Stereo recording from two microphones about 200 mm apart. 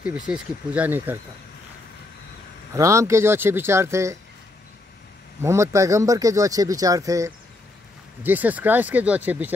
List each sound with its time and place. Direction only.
0.3 s speech: 10° right (ahead or behind)
2.7 s speech: 15° right (ahead or behind)
5.4 s speech: 15° right (ahead or behind)